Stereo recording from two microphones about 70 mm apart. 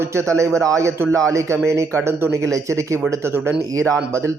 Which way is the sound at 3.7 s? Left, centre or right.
Right.